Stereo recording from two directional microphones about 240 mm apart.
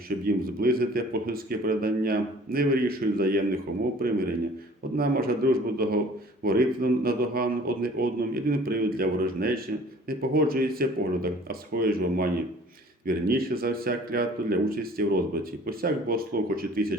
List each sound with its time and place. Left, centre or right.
0.4 s speech: right
4.9 s speech: right